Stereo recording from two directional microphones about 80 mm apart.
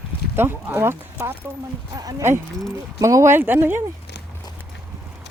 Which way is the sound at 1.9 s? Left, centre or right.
Right.